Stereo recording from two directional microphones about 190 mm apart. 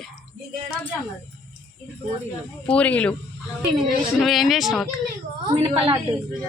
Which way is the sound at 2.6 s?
5° left (ahead or behind).